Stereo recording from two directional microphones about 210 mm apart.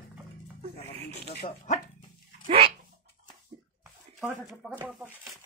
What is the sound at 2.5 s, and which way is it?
Dog, 25° right (ahead or behind).